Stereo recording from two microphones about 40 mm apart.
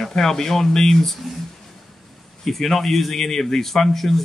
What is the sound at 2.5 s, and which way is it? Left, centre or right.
Speech, centre.